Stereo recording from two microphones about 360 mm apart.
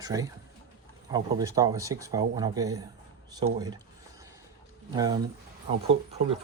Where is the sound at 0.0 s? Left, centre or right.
Centre.